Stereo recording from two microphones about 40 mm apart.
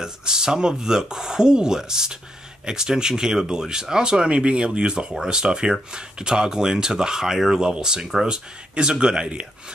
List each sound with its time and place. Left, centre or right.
0.0 s speech: centre
7.6 s speech: centre
8.1 s speech: centre
8.7 s speech: right